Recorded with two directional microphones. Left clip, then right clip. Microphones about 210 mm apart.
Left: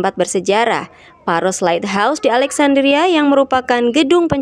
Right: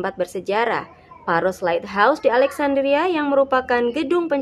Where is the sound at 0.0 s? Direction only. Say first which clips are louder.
Left 8 dB; 35° left (ahead or behind).